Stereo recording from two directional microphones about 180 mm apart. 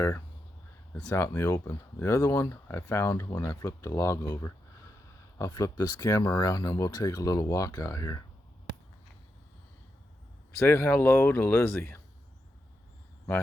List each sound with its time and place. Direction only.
1.0 s speech: 15° left (ahead or behind)
10.6 s speech: 15° left (ahead or behind)